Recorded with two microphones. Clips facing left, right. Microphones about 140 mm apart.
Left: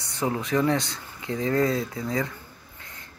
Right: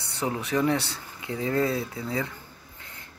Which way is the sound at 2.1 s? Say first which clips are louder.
Left 2 dB; 20° right (ahead or behind).